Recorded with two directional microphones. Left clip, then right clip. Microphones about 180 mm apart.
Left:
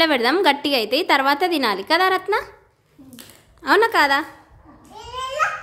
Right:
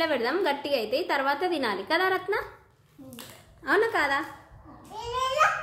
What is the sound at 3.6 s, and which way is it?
Speech, 50° left (ahead or behind).